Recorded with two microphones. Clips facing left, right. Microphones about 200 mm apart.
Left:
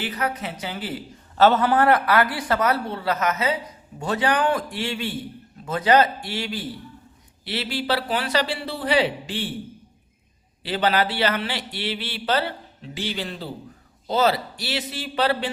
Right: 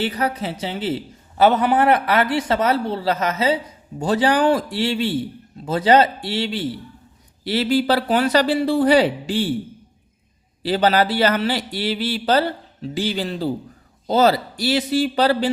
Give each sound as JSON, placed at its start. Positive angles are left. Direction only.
{"t": 0.0, "sound": "speech", "side_deg": -35}
{"t": 1.4, "sound": "speech", "side_deg": -15}
{"t": 7.4, "sound": "a man's voice", "side_deg": -40}
{"t": 10.6, "sound": "speech", "side_deg": -40}